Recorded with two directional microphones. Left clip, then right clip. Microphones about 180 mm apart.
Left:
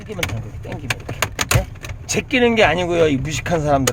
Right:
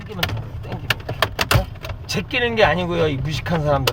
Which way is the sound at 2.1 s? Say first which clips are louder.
Left 5 dB; 70° left (ahead or behind).